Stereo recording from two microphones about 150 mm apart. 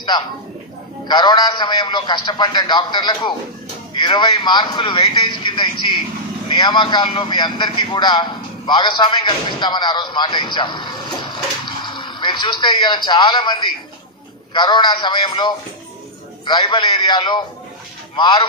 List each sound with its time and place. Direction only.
1.0 s a man's voice: 30° left (ahead or behind)